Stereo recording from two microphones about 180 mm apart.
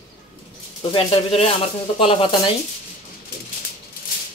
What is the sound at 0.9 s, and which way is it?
Speech, 35° left (ahead or behind).